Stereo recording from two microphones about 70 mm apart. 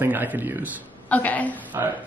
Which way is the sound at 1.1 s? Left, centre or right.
Left.